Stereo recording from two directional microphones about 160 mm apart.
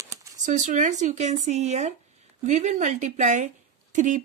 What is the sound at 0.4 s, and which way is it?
Speech, 50° right (ahead or behind).